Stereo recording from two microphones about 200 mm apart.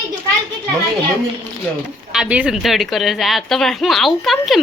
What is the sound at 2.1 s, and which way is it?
A woman's voice, 5° right (ahead or behind).